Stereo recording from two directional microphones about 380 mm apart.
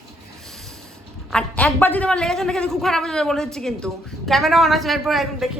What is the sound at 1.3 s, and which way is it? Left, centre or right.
A man's voice, centre.